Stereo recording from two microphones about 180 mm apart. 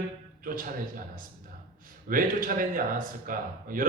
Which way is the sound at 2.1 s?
50° right (ahead or behind).